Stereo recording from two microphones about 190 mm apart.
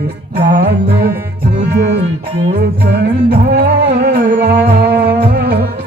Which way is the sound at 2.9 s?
60° right (ahead or behind).